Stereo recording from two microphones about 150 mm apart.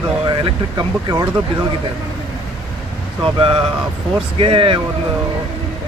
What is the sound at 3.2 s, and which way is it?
Speech, 35° right (ahead or behind).